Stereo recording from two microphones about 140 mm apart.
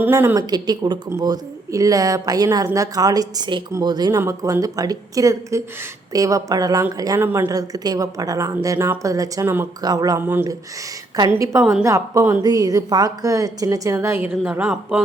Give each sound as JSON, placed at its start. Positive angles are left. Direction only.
{"t": 0.0, "sound": "speech", "side_deg": -15}
{"t": 0.5, "sound": "speech", "side_deg": -30}
{"t": 10.2, "sound": "speech", "side_deg": -15}
{"t": 11.8, "sound": "speech", "side_deg": -20}
{"t": 14.4, "sound": "speech", "side_deg": -10}